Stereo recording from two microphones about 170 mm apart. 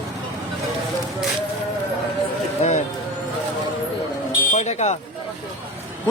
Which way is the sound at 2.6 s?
45° left (ahead or behind).